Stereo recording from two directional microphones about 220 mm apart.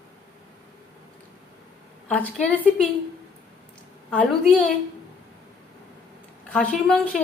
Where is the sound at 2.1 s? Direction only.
5° left (ahead or behind).